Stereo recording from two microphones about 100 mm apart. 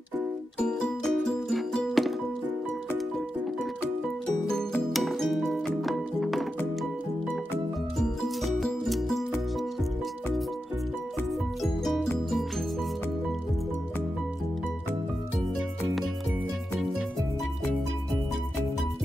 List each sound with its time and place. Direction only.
0.6 s music: 10° left (ahead or behind)
4.3 s music: 5° left (ahead or behind)
8.0 s music: centre (ahead or behind)
11.6 s music: centre (ahead or behind)